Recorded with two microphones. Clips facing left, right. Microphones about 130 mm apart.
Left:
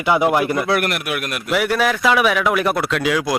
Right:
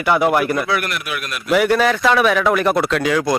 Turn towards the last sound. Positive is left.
turn(degrees=5)  # may be behind; listen again after turning